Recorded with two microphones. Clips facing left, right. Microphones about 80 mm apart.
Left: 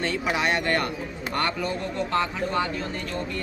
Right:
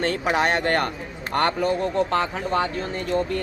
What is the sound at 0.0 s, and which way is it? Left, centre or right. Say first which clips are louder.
Speech: right 4 dB; right.